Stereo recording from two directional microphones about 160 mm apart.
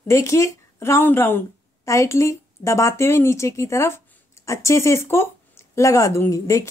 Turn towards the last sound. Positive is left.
turn(degrees=20)  # may be behind; listen again after turning